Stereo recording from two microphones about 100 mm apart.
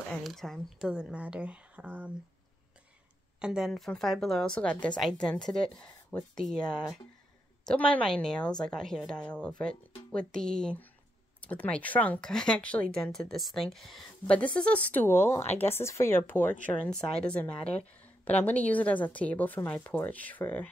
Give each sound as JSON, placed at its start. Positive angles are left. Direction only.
{"t": 0.2, "sound": "speech", "side_deg": 0}
{"t": 3.3, "sound": "speech", "side_deg": -10}
{"t": 7.6, "sound": "speech", "side_deg": 10}
{"t": 14.2, "sound": "speech", "side_deg": 15}